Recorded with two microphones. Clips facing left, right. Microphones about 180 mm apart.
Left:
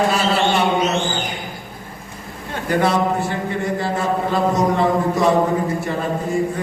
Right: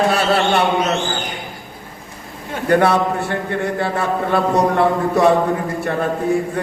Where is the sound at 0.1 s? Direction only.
60° right (ahead or behind).